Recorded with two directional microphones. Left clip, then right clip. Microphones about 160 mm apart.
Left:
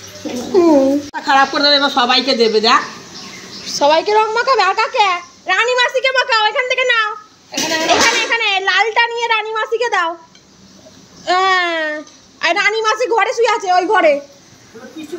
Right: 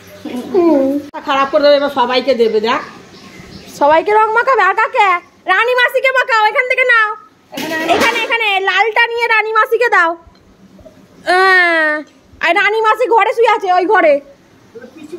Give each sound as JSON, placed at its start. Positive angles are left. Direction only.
{"t": 0.6, "sound": "a child's voice", "side_deg": 0}
{"t": 1.8, "sound": "a woman's voice", "side_deg": 20}
{"t": 3.7, "sound": "a child's voice", "side_deg": -20}
{"t": 11.2, "sound": "a woman's voice", "side_deg": -50}